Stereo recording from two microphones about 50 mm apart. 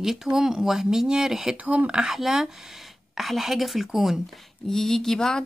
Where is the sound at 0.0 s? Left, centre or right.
Centre.